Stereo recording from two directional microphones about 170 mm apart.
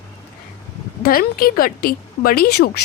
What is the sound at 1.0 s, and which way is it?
Speech, 60° left (ahead or behind).